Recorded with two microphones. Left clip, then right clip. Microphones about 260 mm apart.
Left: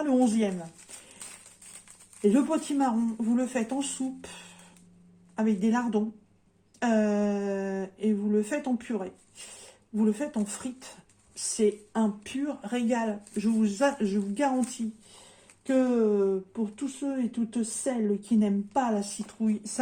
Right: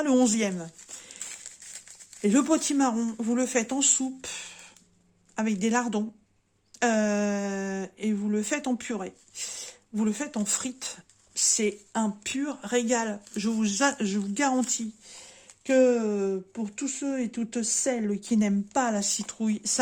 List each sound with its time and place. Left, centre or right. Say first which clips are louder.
0.0 s speech: right 2 dB; right
2.2 s speech: right 1 dB; right
5.4 s speech: right 1 dB; right
15.6 s speech: right 3 dB; right